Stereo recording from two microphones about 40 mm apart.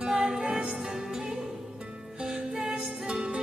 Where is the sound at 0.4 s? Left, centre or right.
Right.